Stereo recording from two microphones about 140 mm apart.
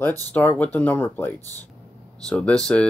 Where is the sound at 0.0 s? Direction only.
15° left (ahead or behind).